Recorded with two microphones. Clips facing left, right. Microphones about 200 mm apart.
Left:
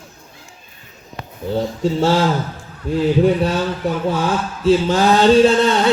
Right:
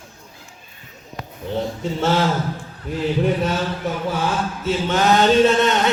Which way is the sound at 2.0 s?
30° left (ahead or behind).